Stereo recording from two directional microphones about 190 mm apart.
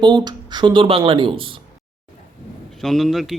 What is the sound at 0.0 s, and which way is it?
Speech, 25° right (ahead or behind).